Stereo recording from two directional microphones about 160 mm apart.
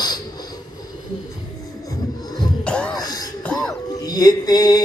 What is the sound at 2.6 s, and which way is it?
Music, 5° left (ahead or behind).